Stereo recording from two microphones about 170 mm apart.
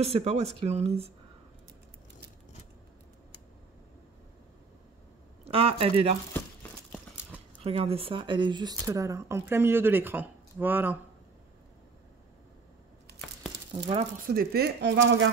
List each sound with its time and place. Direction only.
0.0 s speech: 35° right (ahead or behind)
5.4 s speech: 35° right (ahead or behind)
7.6 s speech: 35° right (ahead or behind); by 11.0 s 10° right (ahead or behind)
14.1 s speech: 55° right (ahead or behind); by 15.2 s 90° right